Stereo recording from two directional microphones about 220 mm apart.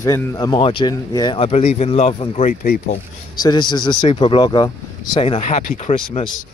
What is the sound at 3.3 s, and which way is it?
Speech, 20° left (ahead or behind).